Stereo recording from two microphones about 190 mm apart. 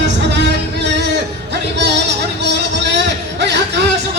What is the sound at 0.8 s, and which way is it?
Music, 60° right (ahead or behind).